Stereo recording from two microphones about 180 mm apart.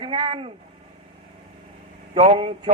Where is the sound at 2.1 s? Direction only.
30° right (ahead or behind).